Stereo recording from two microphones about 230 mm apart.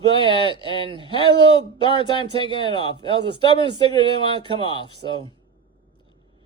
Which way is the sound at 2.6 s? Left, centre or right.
Right.